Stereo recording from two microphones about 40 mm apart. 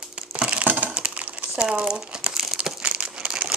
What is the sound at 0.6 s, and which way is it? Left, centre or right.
Crumpling, right.